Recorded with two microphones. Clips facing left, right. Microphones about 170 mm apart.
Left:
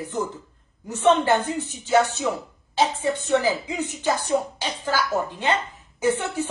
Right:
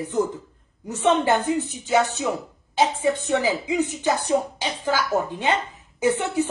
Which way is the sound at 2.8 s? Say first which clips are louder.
Right 2 dB; 15° right (ahead or behind).